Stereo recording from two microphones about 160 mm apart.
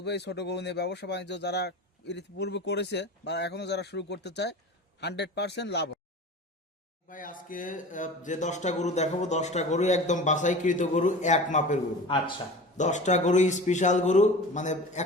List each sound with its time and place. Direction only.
0.0 s speech: 90° left
7.1 s speech: 60° left (ahead or behind)